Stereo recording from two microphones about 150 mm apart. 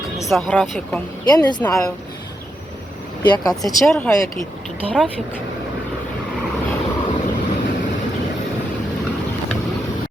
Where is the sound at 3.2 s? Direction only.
30° left (ahead or behind).